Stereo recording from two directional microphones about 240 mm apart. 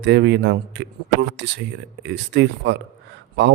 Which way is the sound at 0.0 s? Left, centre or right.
Right.